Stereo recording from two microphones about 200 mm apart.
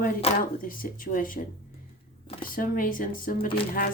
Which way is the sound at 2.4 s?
45° left (ahead or behind).